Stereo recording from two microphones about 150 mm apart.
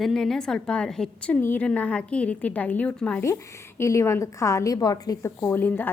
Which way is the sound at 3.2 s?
20° left (ahead or behind).